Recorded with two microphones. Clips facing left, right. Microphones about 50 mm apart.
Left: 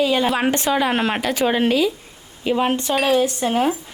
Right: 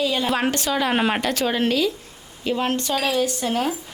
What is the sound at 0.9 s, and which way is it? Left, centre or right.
Speech, centre.